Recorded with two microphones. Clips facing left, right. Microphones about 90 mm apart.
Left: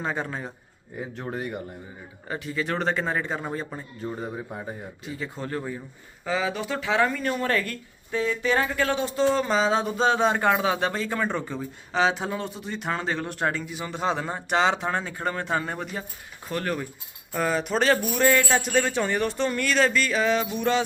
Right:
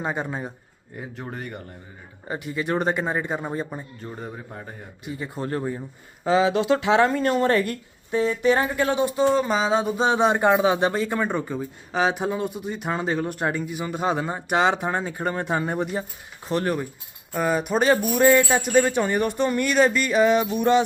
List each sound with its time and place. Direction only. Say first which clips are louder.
0.0 s speech: right 2 dB; 15° right (ahead or behind)
0.9 s speech: left 2 dB; centre (ahead or behind)
2.2 s speech: right 2 dB; 20° right (ahead or behind)
4.0 s a man's voice: left 3 dB; 5° left (ahead or behind)
5.0 s speech: right 4 dB; 15° right (ahead or behind)
7.1 s speech: right 5 dB; 35° right (ahead or behind)
7.3 s speech: right 5 dB; 20° right (ahead or behind)
17.3 s speech: right 2 dB; 5° right (ahead or behind)